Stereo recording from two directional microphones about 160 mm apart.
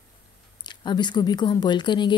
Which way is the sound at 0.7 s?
30° left (ahead or behind).